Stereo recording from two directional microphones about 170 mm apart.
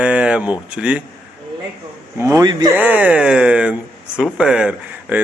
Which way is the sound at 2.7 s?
10° right (ahead or behind).